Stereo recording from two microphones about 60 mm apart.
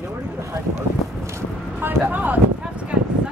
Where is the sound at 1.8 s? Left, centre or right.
Right.